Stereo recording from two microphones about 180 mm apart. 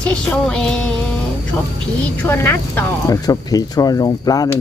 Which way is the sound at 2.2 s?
10° left (ahead or behind).